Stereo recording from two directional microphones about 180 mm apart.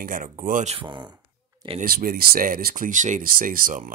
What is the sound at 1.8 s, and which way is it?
Speech, 50° right (ahead or behind).